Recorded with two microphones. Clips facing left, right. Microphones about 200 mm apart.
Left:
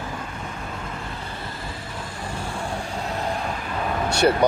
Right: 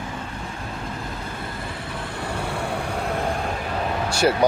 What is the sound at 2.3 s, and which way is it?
Vehicle, 65° right (ahead or behind).